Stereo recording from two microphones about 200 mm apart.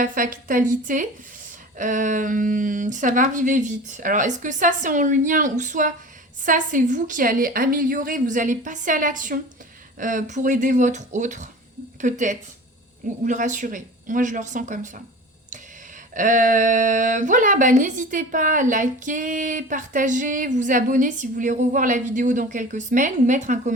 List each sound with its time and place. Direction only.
0.0 s a woman's voice: 45° right (ahead or behind)
16.1 s speech: 40° right (ahead or behind)